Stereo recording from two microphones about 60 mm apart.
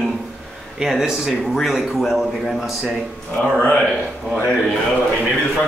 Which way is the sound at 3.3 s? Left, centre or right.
Centre.